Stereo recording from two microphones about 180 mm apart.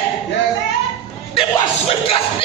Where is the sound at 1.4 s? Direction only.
30° left (ahead or behind).